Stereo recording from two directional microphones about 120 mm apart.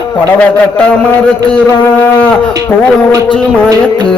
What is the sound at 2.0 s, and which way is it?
Mantra, 15° left (ahead or behind).